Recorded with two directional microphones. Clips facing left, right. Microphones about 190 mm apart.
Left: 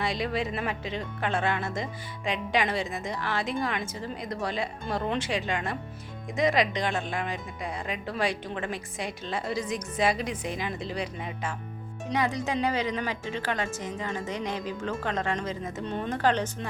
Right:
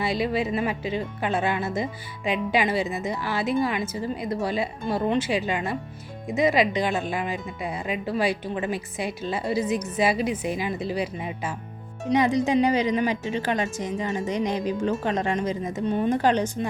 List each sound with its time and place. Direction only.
0.0 s speech: 5° right (ahead or behind)
12.1 s a woman's voice: 20° right (ahead or behind)